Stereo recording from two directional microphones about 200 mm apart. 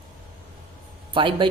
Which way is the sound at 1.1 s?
25° right (ahead or behind).